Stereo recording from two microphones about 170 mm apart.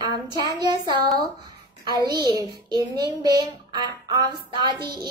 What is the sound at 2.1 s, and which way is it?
A child's voice, 25° right (ahead or behind).